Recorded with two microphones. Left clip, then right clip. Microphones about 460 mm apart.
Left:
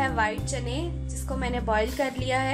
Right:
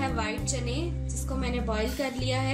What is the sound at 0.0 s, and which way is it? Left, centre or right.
Music, centre.